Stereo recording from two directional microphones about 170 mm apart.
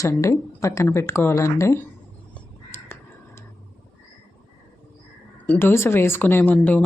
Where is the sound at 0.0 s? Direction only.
15° left (ahead or behind).